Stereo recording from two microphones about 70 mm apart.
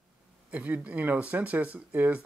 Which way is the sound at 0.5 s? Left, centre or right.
Right.